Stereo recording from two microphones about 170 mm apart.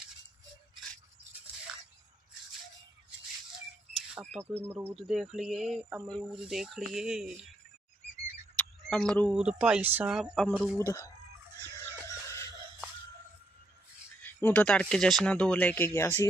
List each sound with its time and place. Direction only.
3.9 s speech: centre (ahead or behind)
8.5 s a sound: 5° left (ahead or behind)
9.3 s speech: 5° right (ahead or behind)
10.8 s speech: 15° left (ahead or behind)
11.7 s music: 15° left (ahead or behind)
14.2 s speech: 10° left (ahead or behind)